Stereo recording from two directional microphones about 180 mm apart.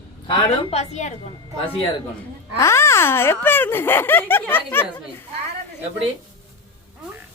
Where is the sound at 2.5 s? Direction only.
15° left (ahead or behind).